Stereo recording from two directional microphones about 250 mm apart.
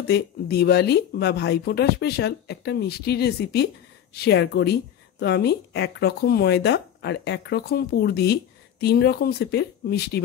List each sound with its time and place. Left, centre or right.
0.1 s speech: left